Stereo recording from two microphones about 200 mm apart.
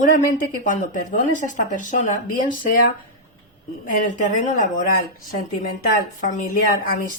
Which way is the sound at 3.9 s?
40° left (ahead or behind).